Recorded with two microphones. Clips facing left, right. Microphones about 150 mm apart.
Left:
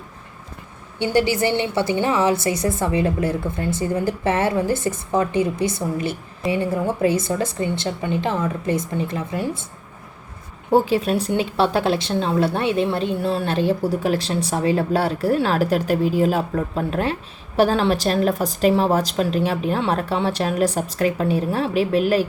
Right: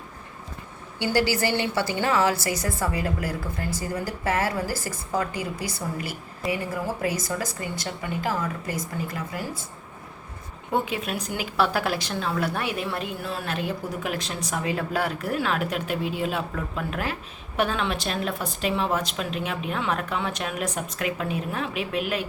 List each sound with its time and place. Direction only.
0.9 s a woman's voice: 25° left (ahead or behind)
10.7 s speech: 35° left (ahead or behind)